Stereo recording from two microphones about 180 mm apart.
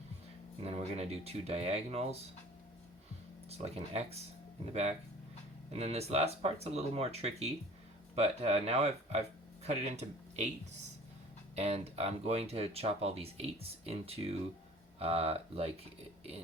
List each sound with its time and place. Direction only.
0.6 s speech: 35° right (ahead or behind)
3.5 s speech: 35° right (ahead or behind)
11.5 s speech: 35° right (ahead or behind)